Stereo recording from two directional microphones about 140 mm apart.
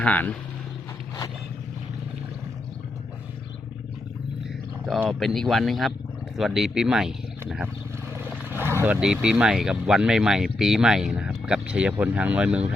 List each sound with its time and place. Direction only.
0.0 s speech: 10° left (ahead or behind)
5.0 s speech: centre (ahead or behind)
8.1 s vehicle: 15° right (ahead or behind)
9.0 s speech: 5° right (ahead or behind)